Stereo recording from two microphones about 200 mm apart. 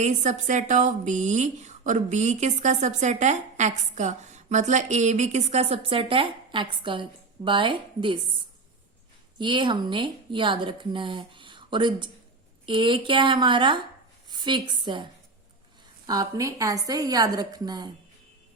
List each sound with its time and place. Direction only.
0.0 s speech: 35° right (ahead or behind)
9.4 s a woman's voice: 25° right (ahead or behind)